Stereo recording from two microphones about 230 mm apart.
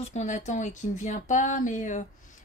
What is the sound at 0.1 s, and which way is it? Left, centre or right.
Speech, left.